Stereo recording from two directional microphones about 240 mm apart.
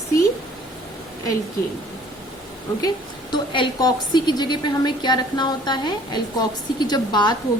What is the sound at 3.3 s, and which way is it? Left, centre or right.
A woman's voice, centre.